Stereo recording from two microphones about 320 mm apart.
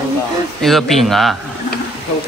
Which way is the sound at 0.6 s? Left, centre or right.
Centre.